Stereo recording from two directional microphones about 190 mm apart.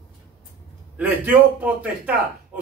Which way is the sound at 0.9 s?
10° right (ahead or behind).